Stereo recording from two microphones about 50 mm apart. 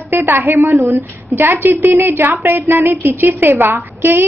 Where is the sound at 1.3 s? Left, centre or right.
Right.